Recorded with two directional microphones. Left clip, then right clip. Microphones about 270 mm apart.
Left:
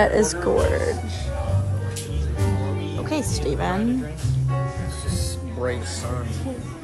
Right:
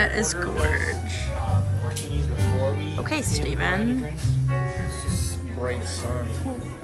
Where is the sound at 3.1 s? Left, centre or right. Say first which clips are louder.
Left 3 dB; centre.